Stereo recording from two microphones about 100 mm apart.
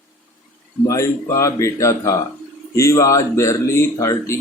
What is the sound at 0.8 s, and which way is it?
Speech, 30° left (ahead or behind).